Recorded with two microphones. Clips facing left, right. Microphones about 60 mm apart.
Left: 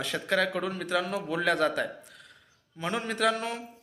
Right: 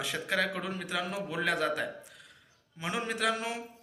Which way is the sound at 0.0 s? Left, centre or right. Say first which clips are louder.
Left 3 dB; centre.